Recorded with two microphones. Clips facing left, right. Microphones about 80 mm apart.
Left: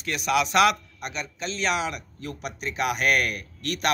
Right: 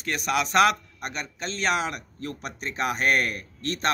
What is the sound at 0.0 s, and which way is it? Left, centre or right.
A man's voice, right.